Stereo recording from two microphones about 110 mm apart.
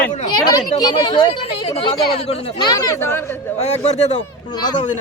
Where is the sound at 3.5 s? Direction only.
80° left.